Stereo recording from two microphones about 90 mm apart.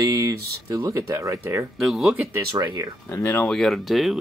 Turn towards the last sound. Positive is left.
turn(degrees=0)  # may be behind; listen again after turning